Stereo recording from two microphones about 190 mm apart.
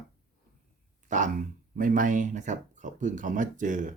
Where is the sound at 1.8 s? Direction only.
45° right (ahead or behind).